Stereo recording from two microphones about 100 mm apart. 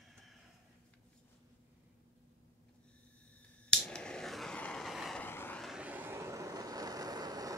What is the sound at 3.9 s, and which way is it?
Vehicle, 5° left (ahead or behind).